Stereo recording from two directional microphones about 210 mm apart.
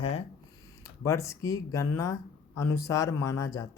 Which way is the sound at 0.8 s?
15° left (ahead or behind).